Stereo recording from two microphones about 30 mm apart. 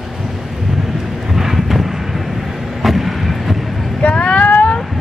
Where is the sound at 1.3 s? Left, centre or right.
Centre.